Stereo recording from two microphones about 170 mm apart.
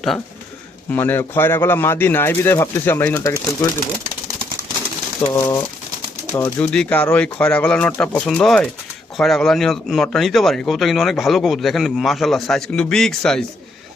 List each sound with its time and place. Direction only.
0.9 s speech: 10° left (ahead or behind)
5.3 s a man's voice: 15° left (ahead or behind)